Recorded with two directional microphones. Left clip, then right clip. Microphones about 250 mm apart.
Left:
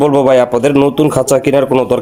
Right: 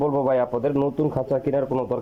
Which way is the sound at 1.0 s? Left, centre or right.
Left.